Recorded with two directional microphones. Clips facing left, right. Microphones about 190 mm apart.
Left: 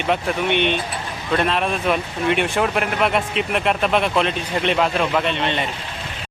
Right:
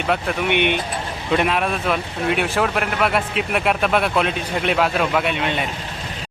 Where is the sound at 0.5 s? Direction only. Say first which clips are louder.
Right 1 dB; 15° right (ahead or behind).